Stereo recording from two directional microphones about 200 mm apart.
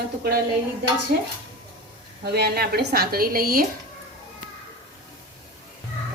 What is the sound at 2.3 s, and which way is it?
A woman's voice, 55° right (ahead or behind).